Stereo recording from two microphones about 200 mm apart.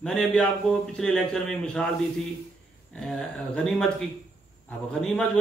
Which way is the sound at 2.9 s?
5° left (ahead or behind).